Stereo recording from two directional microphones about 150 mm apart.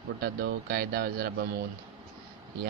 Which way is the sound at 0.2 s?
90° right.